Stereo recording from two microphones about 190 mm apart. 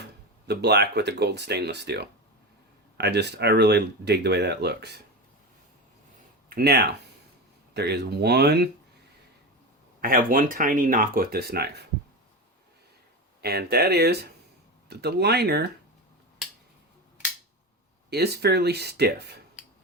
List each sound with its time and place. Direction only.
0.4 s speech: 60° right (ahead or behind)
6.5 s speech: 55° right (ahead or behind)
10.0 s speech: 45° right (ahead or behind)
13.4 s speech: 55° right (ahead or behind)
18.1 s speech: 60° right (ahead or behind)